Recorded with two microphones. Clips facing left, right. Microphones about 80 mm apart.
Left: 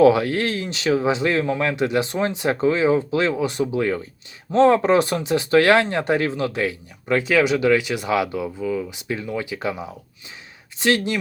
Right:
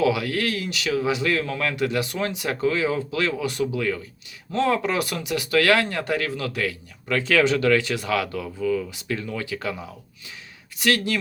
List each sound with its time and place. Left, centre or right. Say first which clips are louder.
0.0 s speech: left 7 dB; left